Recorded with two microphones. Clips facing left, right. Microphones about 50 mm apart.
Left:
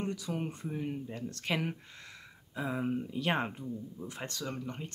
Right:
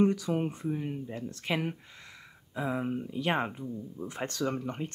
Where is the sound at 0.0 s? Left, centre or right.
Right.